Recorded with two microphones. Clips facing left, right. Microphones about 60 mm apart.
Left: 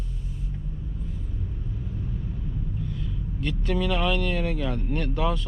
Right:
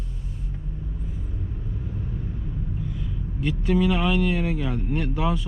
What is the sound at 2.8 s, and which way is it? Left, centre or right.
Speech, centre.